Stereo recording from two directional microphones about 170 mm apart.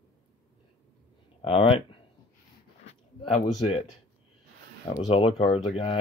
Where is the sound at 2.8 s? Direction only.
35° left (ahead or behind).